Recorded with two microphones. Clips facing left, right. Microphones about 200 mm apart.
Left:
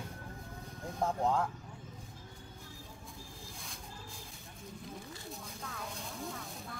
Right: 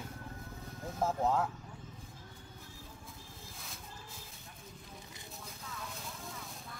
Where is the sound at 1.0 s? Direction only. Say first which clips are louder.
Even; 5° right (ahead or behind).